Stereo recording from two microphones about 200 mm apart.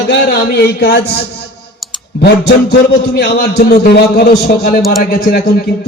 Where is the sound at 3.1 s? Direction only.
50° left (ahead or behind).